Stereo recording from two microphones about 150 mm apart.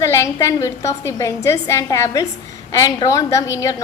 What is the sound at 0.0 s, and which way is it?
A woman's voice, 20° left (ahead or behind).